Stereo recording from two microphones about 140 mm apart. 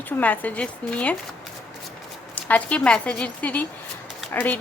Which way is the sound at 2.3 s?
10° left (ahead or behind).